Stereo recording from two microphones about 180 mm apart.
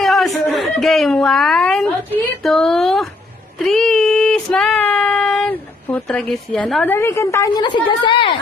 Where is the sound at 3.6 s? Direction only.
5° left (ahead or behind).